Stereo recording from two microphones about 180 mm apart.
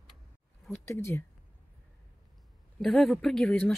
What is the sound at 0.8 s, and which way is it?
Speech, 15° left (ahead or behind).